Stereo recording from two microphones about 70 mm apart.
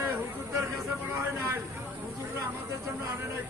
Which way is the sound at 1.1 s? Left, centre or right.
Right.